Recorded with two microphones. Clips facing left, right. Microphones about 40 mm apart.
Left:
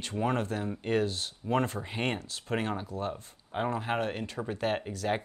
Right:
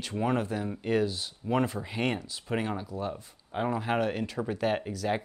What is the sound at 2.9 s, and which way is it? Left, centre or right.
Speech, left.